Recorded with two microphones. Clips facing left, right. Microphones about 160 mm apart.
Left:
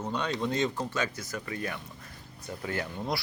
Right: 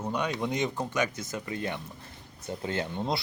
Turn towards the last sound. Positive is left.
turn(degrees=-25)  # may be behind; listen again after turning